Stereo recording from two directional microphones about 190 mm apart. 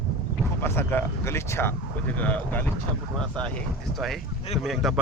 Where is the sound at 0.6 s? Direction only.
10° left (ahead or behind).